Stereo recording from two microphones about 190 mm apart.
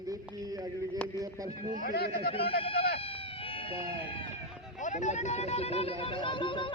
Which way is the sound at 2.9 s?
30° left (ahead or behind).